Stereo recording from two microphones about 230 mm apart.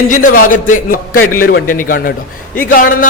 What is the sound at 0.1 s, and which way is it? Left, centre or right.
A man's voice, left.